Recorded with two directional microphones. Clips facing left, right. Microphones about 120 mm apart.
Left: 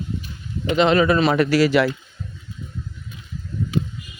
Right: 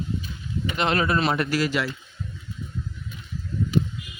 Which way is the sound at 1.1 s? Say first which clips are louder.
Left 6 dB; 90° left.